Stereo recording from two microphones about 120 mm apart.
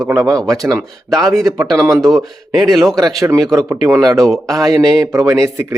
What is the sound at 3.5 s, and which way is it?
Speech, 30° right (ahead or behind).